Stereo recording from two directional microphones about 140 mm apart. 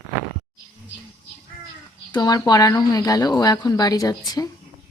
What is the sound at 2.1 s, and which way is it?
A woman's voice, 30° left (ahead or behind).